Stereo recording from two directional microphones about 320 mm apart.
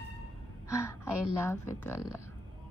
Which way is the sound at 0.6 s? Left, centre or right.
Centre.